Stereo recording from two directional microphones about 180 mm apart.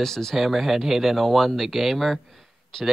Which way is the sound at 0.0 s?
Centre (ahead or behind).